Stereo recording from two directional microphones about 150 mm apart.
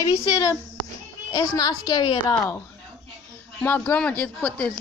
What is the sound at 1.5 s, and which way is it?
Speech, 25° left (ahead or behind).